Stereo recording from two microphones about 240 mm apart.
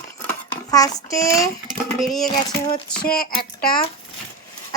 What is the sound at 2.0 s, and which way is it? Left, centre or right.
Speech, centre.